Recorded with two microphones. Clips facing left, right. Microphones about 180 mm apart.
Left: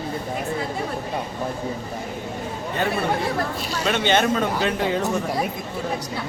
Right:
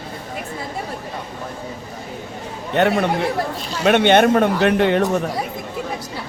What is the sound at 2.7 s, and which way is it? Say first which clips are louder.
Speech: right 8 dB; 75° right (ahead or behind).